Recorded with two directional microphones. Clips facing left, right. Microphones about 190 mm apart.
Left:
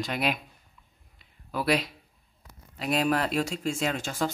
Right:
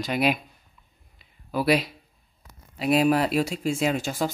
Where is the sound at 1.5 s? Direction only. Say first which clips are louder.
Right 4 dB; 5° right (ahead or behind).